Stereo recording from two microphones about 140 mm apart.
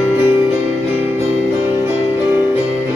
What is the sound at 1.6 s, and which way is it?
Music, 15° right (ahead or behind).